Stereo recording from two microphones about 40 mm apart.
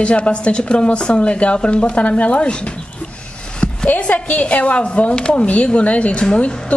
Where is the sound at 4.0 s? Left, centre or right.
Left.